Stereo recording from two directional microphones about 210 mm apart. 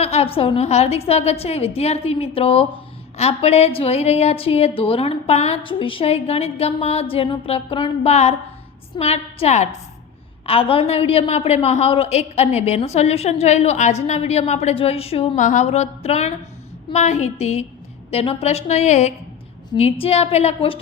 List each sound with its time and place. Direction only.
0.0 s a woman's voice: 30° left (ahead or behind)